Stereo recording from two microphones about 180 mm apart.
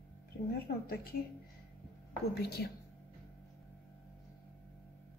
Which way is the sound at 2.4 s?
65° left (ahead or behind).